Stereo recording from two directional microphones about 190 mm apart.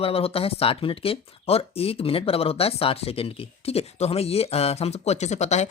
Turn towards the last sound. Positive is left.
turn(degrees=35)  # may be behind; listen again after turning